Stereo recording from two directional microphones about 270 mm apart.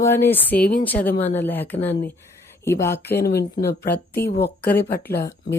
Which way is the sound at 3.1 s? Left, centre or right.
Left.